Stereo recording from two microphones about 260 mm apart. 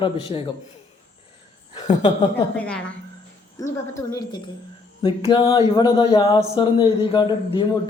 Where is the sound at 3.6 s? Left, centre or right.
Centre.